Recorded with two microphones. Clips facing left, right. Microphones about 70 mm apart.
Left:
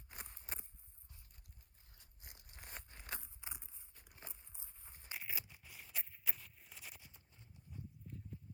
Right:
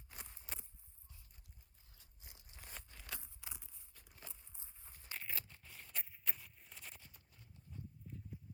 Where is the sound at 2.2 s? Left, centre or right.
Left.